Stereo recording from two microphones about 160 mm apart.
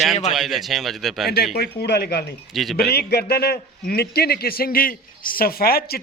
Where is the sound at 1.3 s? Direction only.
80° left.